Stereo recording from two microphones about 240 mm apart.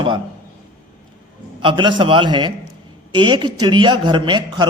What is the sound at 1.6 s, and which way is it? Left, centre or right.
Speech, centre.